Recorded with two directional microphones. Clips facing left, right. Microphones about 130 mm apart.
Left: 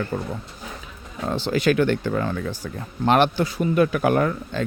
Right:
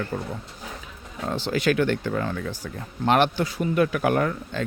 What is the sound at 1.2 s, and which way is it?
A man's voice, 30° left (ahead or behind).